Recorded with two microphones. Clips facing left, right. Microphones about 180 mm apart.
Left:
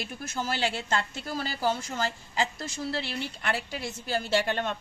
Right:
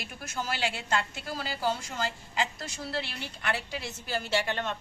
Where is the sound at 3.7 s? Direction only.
50° left (ahead or behind).